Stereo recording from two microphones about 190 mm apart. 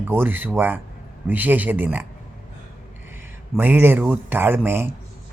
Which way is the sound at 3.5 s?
10° right (ahead or behind).